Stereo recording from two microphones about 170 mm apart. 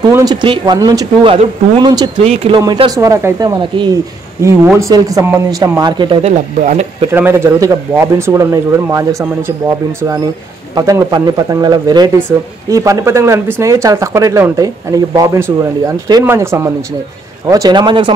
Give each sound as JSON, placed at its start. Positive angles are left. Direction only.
{"t": 0.0, "sound": "speech", "side_deg": -20}
{"t": 2.2, "sound": "speech", "side_deg": -35}
{"t": 2.6, "sound": "speech", "side_deg": -25}
{"t": 6.6, "sound": "speech", "side_deg": -45}
{"t": 7.1, "sound": "speech", "side_deg": -15}
{"t": 10.7, "sound": "speech", "side_deg": -20}